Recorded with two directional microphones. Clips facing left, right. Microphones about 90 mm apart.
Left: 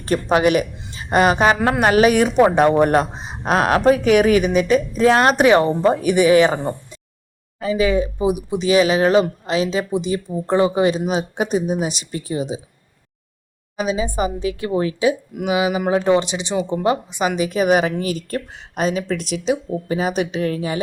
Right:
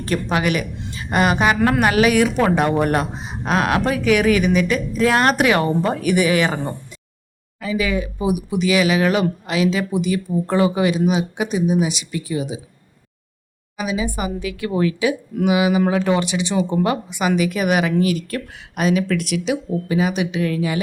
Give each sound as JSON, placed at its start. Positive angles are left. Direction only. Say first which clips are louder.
{"t": 0.0, "sound": "speech", "louder": "left 4 dB", "side_deg": 35}
{"t": 1.6, "sound": "speech", "louder": "left 1 dB", "side_deg": 25}
{"t": 13.7, "sound": "speech", "louder": "left 3 dB", "side_deg": 30}